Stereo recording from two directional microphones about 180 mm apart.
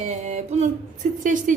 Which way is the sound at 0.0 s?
40° right (ahead or behind).